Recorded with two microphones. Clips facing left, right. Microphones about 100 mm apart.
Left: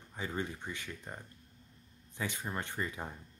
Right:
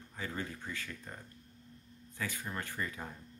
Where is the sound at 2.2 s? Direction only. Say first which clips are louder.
Left 2 dB; 20° left (ahead or behind).